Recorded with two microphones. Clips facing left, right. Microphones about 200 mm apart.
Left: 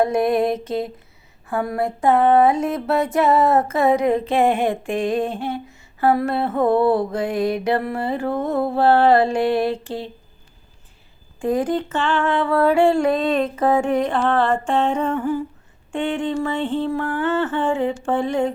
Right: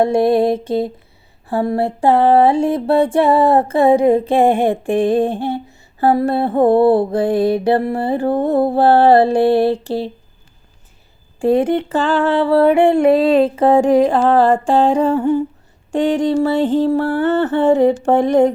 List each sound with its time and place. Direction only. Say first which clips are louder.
0.0 s music: right 5 dB; 30° right (ahead or behind)
11.4 s music: right 6 dB; 25° right (ahead or behind)
11.9 s music: right 6 dB; 35° right (ahead or behind)
15.9 s music: right 7 dB; 40° right (ahead or behind)